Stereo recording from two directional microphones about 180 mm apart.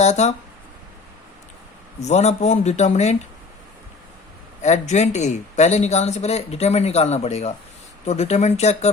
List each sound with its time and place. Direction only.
0.0 s speech: 40° left (ahead or behind)
2.0 s speech: 40° left (ahead or behind)
4.6 s speech: 40° left (ahead or behind)